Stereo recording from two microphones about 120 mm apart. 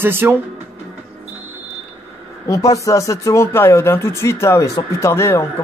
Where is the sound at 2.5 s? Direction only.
25° left (ahead or behind).